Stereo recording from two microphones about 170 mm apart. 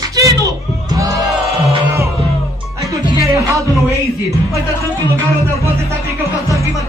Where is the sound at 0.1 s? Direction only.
20° right (ahead or behind).